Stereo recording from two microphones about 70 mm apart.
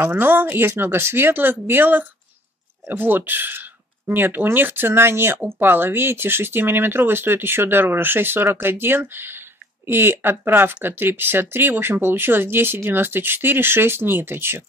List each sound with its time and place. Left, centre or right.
0.0 s speech: right